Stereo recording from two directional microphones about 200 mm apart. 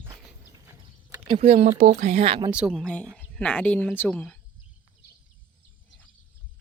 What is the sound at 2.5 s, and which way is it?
A woman's voice, 5° right (ahead or behind).